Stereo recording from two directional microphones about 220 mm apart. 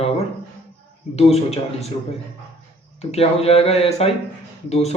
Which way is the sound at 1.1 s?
30° left (ahead or behind).